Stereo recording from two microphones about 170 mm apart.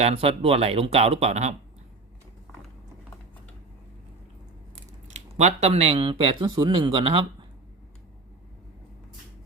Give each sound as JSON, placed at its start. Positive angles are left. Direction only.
{"t": 0.0, "sound": "speech", "side_deg": -35}
{"t": 5.0, "sound": "speech", "side_deg": -40}